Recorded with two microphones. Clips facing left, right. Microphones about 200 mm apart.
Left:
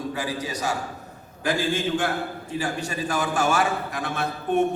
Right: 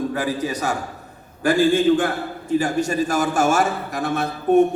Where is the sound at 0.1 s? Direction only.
50° right (ahead or behind).